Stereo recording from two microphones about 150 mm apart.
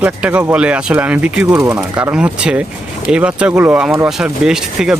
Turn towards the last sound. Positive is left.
turn(degrees=-5)  # may be behind; listen again after turning